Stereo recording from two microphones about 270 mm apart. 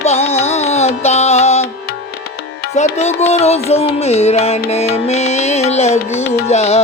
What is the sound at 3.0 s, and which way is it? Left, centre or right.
Music, left.